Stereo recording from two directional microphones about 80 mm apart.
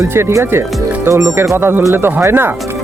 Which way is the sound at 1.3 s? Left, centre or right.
Right.